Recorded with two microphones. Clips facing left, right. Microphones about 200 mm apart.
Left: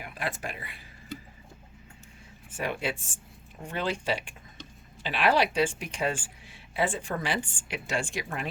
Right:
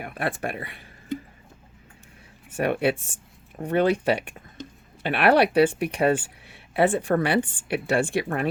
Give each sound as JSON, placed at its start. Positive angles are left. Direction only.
{"t": 0.0, "sound": "a woman's voice", "side_deg": -60}
{"t": 2.6, "sound": "a woman's voice", "side_deg": -60}